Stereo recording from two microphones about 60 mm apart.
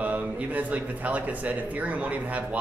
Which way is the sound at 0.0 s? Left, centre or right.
Right.